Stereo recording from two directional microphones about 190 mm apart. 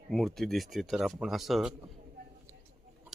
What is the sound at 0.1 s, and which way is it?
A man's voice, centre (ahead or behind).